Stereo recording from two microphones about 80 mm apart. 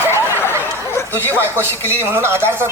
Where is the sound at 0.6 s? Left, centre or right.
Left.